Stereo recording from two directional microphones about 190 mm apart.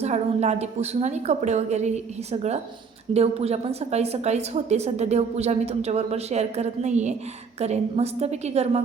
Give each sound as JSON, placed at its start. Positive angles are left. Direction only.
{"t": 0.0, "sound": "a woman's voice", "side_deg": -35}